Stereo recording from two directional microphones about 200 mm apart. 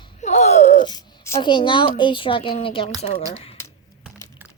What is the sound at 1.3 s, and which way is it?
A woman's voice, 25° left (ahead or behind).